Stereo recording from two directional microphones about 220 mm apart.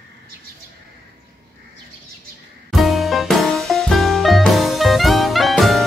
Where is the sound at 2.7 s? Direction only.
Centre (ahead or behind).